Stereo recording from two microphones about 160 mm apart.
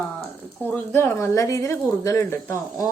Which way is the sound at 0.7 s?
10° left (ahead or behind).